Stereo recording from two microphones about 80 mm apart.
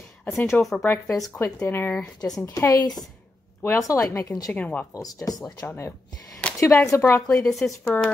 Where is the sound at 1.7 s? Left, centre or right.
Left.